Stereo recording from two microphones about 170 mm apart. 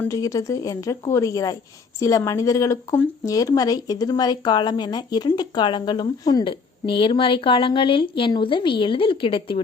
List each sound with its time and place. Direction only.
0.0 s speech: 20° left (ahead or behind)